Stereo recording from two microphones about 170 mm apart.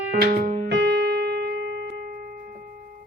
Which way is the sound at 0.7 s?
80° right.